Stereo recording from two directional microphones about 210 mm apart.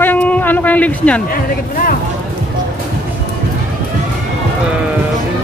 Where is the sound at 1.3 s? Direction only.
40° left (ahead or behind).